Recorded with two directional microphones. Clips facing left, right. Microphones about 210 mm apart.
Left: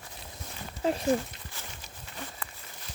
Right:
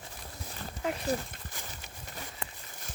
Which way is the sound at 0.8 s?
30° left (ahead or behind).